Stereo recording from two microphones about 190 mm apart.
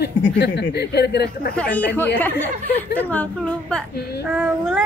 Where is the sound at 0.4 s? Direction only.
60° left (ahead or behind).